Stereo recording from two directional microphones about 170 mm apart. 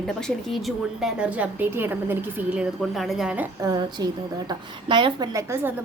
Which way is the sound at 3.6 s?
25° right (ahead or behind).